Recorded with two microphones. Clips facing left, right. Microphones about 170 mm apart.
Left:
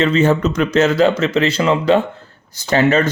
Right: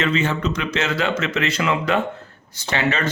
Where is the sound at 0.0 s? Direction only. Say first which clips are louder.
Left 7 dB; 40° left (ahead or behind).